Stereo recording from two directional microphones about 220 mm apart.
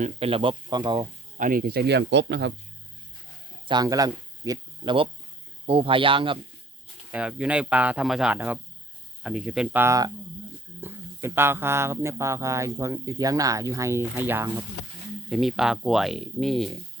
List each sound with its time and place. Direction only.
0.0 s speech: 25° right (ahead or behind)
1.4 s speech: 40° right (ahead or behind)
3.7 s speech: 15° right (ahead or behind)
7.1 s speech: 5° right (ahead or behind)